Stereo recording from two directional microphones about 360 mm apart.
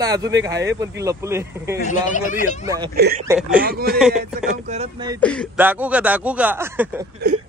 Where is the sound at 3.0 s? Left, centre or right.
Right.